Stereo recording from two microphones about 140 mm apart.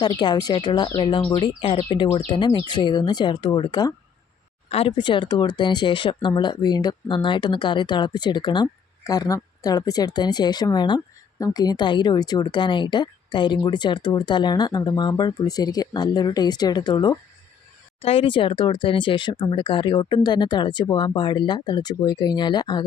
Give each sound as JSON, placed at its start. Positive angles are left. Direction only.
{"t": 0.0, "sound": "speech", "side_deg": 30}
{"t": 18.0, "sound": "speech", "side_deg": 45}